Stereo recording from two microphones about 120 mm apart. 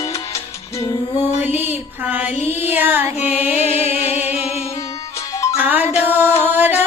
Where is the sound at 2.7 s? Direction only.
15° right (ahead or behind).